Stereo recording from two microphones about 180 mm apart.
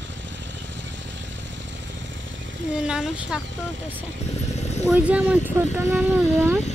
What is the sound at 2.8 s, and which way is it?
Speech, 5° right (ahead or behind).